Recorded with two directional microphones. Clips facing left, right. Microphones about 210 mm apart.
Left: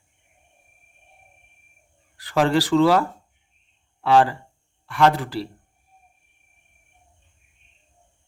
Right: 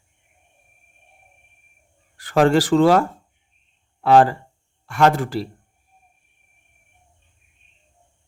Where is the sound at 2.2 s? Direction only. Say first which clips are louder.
Right 4 dB; 50° right (ahead or behind).